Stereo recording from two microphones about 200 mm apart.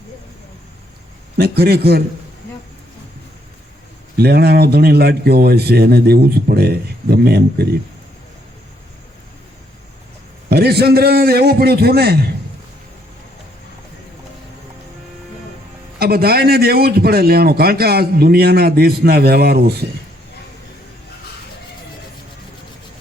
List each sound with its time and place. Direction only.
1.4 s a man's voice: 50° right (ahead or behind)
4.2 s a man's voice: 50° right (ahead or behind)
10.5 s a man's voice: 50° right (ahead or behind)
16.0 s a man's voice: 50° right (ahead or behind)